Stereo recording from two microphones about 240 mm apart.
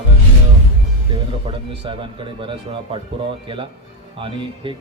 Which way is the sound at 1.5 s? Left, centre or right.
Right.